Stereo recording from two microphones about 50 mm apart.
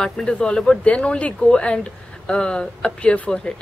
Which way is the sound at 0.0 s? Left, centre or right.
Centre.